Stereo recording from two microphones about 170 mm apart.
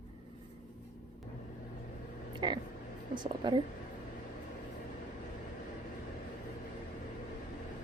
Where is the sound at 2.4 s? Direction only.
25° right (ahead or behind).